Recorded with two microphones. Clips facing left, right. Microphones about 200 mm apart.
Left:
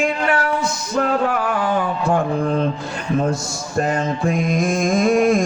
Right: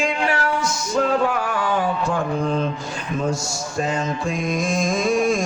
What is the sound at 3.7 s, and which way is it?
Mantra, 60° left (ahead or behind).